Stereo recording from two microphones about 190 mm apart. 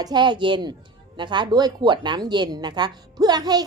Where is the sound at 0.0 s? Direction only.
25° right (ahead or behind).